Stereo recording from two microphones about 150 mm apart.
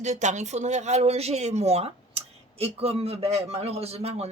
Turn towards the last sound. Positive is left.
turn(degrees=-45)  # may be behind; listen again after turning